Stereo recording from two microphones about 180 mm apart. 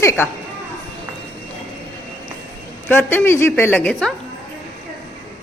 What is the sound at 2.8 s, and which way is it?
A woman's voice, 10° left (ahead or behind).